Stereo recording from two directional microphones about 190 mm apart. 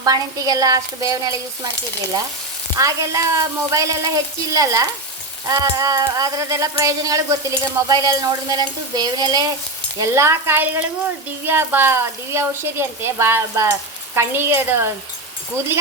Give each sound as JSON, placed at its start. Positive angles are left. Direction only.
{"t": 0.0, "sound": "stir", "side_deg": -20}
{"t": 2.7, "sound": "a woman's voice", "side_deg": -15}
{"t": 7.9, "sound": "stir", "side_deg": -20}
{"t": 10.0, "sound": "a woman's voice", "side_deg": -15}